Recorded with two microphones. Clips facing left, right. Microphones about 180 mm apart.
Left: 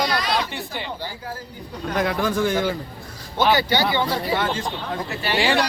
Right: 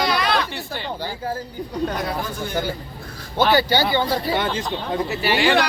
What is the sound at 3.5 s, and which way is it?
Speech, 35° right (ahead or behind).